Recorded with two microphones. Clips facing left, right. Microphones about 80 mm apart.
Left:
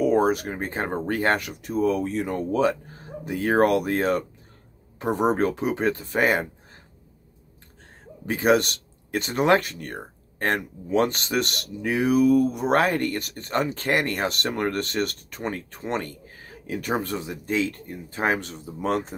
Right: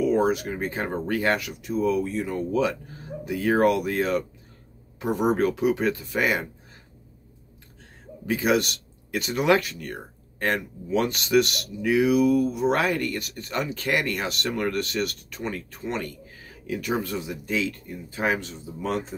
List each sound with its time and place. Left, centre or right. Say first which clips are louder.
0.0 s speech: left 1 dB; left
8.3 s speech: left 2 dB; left